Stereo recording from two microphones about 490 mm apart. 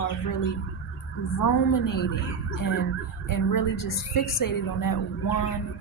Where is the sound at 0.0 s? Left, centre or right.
Left.